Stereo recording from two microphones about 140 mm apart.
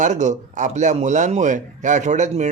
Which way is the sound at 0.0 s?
60° right (ahead or behind).